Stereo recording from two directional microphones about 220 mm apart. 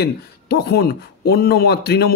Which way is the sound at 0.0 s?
45° left (ahead or behind).